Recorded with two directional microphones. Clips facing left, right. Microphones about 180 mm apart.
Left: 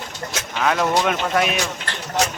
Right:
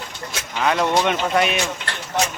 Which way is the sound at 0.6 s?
Centre (ahead or behind).